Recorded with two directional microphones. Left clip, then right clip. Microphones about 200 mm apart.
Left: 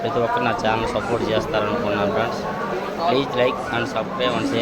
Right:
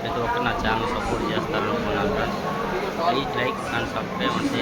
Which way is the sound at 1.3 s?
15° left (ahead or behind).